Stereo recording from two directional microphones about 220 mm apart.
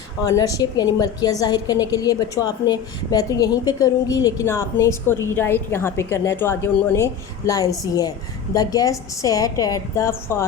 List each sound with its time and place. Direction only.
0.3 s a woman's voice: 15° left (ahead or behind)